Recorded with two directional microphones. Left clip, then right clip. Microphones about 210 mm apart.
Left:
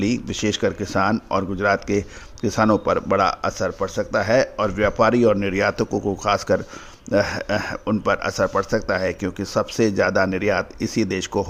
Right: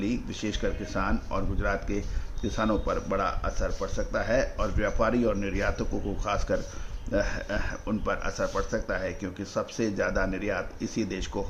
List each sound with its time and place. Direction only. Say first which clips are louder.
0.0 s speech: left 9 dB; 45° left (ahead or behind)